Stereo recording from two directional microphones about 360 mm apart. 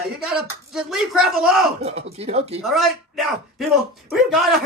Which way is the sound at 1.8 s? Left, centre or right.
Centre.